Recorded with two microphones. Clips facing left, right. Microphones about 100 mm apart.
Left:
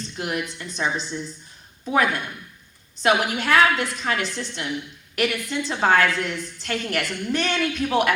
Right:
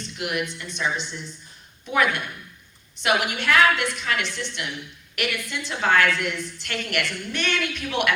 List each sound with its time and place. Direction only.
0.2 s a woman's voice: 35° left (ahead or behind)